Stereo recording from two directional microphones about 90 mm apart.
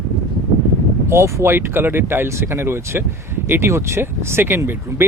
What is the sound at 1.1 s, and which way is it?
Speech, 30° right (ahead or behind).